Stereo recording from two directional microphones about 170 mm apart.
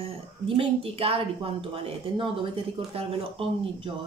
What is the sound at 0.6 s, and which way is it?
A woman's voice, 35° right (ahead or behind).